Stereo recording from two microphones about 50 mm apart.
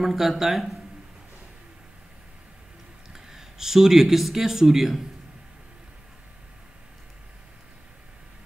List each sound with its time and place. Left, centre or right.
0.0 s speech: centre
3.1 s speech: centre